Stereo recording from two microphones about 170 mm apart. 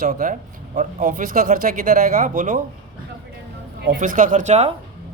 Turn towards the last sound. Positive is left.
turn(degrees=-40)  # may be behind; listen again after turning